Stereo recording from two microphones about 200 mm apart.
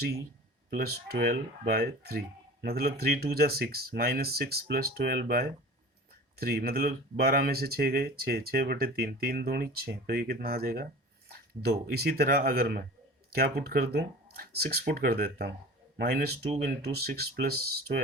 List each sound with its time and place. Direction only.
0.8 s speech: 50° right (ahead or behind)